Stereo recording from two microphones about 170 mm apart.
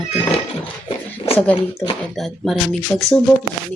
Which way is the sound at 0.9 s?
35° left (ahead or behind).